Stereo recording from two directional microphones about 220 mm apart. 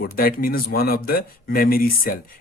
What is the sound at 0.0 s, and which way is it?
Speech, 45° left (ahead or behind).